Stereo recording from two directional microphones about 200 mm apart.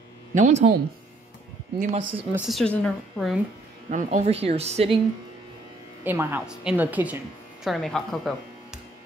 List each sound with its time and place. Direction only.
0.3 s speech: 35° right (ahead or behind)
1.8 s a woman's voice: 40° right (ahead or behind)
2.3 s a woman's voice: centre (ahead or behind)
3.9 s a woman's voice: 35° right (ahead or behind)
6.0 s a woman's voice: 10° right (ahead or behind)